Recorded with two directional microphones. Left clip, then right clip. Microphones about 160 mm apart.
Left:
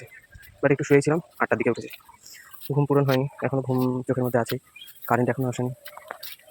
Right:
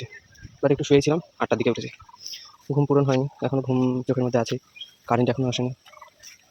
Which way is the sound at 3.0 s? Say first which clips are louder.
Left 1 dB; 15° right (ahead or behind).